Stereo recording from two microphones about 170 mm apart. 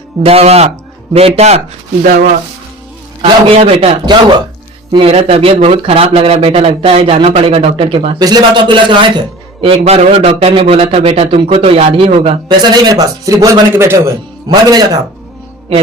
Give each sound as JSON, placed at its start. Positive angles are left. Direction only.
{"t": 0.2, "sound": "speech", "side_deg": -35}
{"t": 3.2, "sound": "speech", "side_deg": -35}
{"t": 12.7, "sound": "speech", "side_deg": -25}